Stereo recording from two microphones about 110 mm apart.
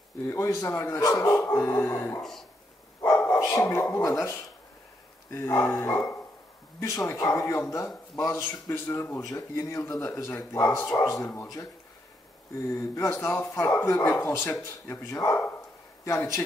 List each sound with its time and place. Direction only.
0.6 s a man's voice: 20° left (ahead or behind)
3.2 s dog: 25° left (ahead or behind)
3.9 s a man's voice: 25° left (ahead or behind)
12.7 s a man's voice: 25° left (ahead or behind)